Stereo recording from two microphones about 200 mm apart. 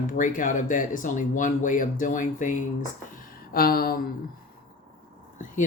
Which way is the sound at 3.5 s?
50° left (ahead or behind).